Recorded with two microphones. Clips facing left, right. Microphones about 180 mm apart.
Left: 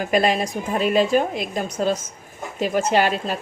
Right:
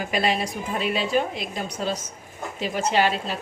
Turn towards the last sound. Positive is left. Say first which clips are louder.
# left 3 dB
turn(degrees=45)  # may be behind; listen again after turning